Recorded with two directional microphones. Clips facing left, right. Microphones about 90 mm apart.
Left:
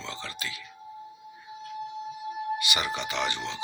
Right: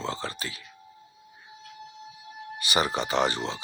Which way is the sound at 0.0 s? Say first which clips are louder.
Right 5 dB; 40° right (ahead or behind).